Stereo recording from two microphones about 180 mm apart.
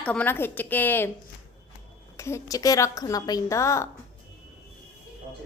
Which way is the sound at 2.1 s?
15° left (ahead or behind).